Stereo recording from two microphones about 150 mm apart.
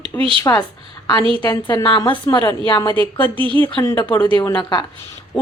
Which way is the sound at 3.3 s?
35° right (ahead or behind).